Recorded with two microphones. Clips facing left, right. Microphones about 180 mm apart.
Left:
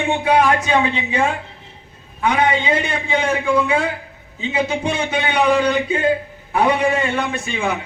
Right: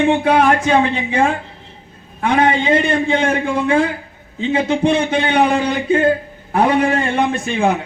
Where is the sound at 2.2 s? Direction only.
50° right (ahead or behind).